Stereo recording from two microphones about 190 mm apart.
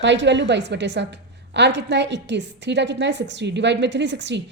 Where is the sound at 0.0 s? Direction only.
70° right (ahead or behind).